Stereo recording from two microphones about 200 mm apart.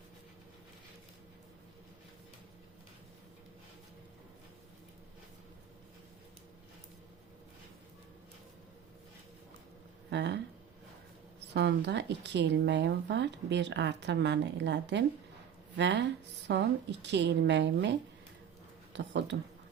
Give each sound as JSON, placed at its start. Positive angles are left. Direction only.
{"t": 10.1, "sound": "a sound", "side_deg": -60}
{"t": 11.5, "sound": "speech", "side_deg": -60}
{"t": 18.9, "sound": "speech", "side_deg": -60}